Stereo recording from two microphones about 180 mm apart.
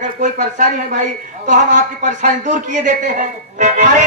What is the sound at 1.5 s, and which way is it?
Music, 45° right (ahead or behind).